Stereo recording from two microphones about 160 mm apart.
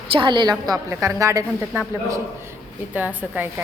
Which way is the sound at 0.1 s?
30° right (ahead or behind).